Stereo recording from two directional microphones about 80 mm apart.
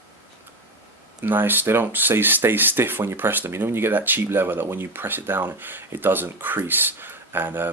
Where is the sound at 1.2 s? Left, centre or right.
Right.